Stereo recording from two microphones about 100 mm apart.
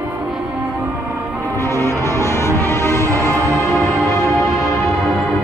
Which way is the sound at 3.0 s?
30° right (ahead or behind).